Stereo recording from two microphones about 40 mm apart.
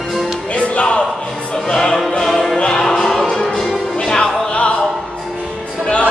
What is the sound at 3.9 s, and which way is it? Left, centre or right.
Music, centre.